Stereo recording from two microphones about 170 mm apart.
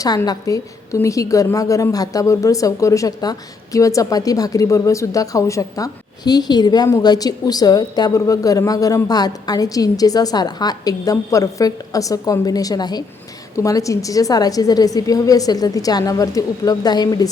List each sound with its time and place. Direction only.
0.0 s a woman's voice: 20° left (ahead or behind)